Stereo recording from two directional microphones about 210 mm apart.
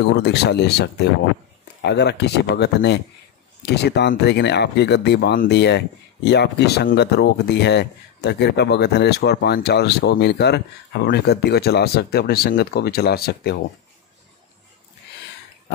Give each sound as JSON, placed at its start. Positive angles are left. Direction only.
{"t": 0.2, "sound": "speech", "side_deg": 55}